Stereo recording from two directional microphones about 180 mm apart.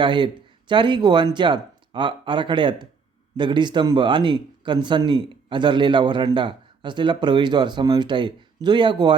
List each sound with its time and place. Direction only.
0.0 s speech: 25° right (ahead or behind)